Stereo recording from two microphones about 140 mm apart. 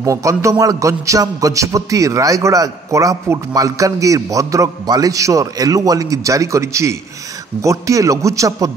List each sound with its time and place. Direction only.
0.0 s a man's voice: 25° right (ahead or behind)